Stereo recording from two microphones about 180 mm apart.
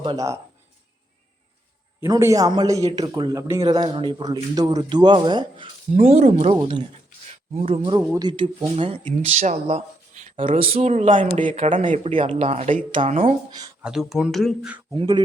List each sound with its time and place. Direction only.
0.0 s speech: 25° right (ahead or behind)
2.0 s speech: 15° right (ahead or behind); by 7.9 s 35° right (ahead or behind)
7.9 s speech: 20° right (ahead or behind)
13.8 s speech: centre (ahead or behind)
14.9 s speech: 25° right (ahead or behind)